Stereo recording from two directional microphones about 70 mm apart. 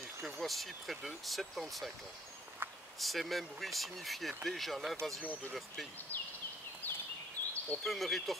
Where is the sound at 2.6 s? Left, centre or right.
Right.